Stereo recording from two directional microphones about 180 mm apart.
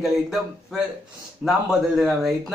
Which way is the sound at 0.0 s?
Centre (ahead or behind).